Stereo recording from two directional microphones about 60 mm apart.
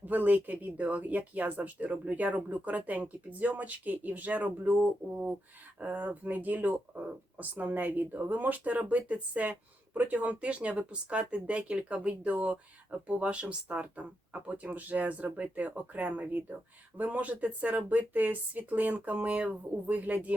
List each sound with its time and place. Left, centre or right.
0.0 s speech: right